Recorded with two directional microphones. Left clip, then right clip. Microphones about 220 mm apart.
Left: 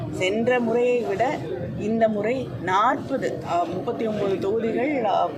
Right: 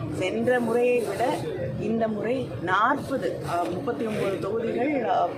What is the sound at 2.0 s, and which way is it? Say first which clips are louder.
Speech: left 6 dB; 20° left (ahead or behind).